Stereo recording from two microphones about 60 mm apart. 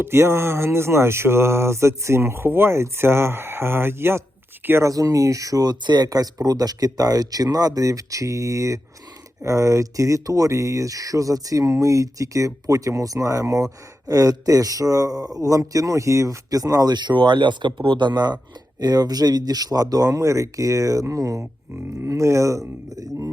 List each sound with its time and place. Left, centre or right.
0.0 s speech: right
4.8 s speech: right
18.8 s speech: right